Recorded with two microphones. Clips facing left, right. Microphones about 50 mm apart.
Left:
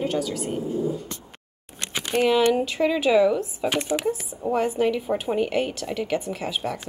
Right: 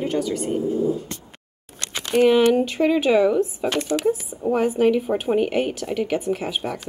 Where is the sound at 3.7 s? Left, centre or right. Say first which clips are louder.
Right 2 dB; centre.